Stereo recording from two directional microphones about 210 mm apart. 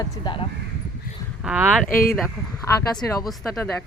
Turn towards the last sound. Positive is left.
turn(degrees=5)  # may be behind; listen again after turning